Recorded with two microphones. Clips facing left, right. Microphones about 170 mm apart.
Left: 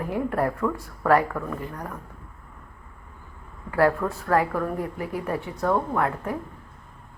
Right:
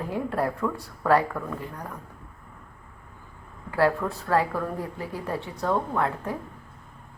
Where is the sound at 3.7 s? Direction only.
25° right (ahead or behind).